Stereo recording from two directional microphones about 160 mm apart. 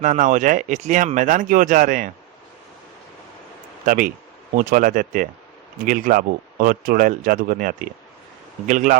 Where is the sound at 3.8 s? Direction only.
60° right (ahead or behind).